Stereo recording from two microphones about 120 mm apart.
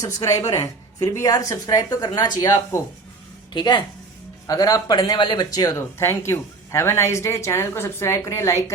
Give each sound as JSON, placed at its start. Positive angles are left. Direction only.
{"t": 0.0, "sound": "a woman's voice", "side_deg": 30}